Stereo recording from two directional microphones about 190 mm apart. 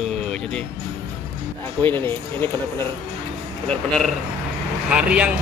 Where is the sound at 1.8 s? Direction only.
10° left (ahead or behind).